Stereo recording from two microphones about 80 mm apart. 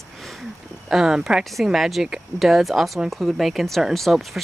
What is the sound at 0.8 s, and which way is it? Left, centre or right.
Speech, centre.